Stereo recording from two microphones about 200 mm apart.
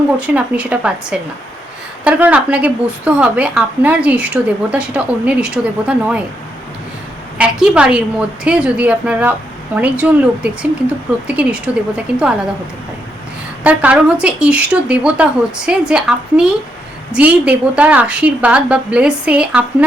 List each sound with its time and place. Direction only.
0.2 s speech: 5° right (ahead or behind)
7.3 s a woman's voice: 5° right (ahead or behind)
13.7 s a woman's voice: 5° right (ahead or behind)